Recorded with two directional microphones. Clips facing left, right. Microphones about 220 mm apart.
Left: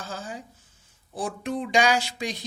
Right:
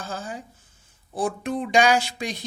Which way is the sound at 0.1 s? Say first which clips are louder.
Right 3 dB; 50° right (ahead or behind).